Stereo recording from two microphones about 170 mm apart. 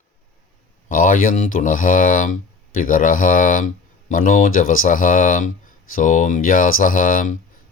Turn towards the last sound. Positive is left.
turn(degrees=50)  # may be behind; listen again after turning